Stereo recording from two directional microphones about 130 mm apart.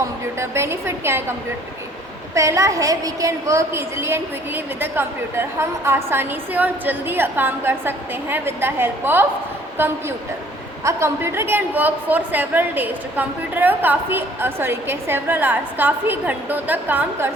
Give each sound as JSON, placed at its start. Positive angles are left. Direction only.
{"t": 0.3, "sound": "a woman's voice", "side_deg": -20}